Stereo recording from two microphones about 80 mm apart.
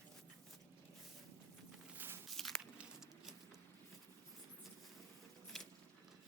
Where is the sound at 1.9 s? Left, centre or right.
Right.